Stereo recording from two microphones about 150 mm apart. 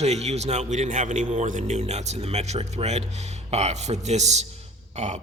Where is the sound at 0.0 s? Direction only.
45° right (ahead or behind).